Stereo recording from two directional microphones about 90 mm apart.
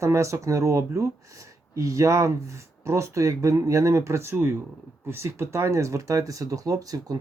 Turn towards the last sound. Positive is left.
turn(degrees=-40)  # may be behind; listen again after turning